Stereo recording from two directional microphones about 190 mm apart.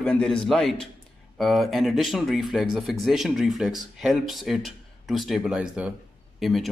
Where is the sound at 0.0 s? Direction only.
5° left (ahead or behind).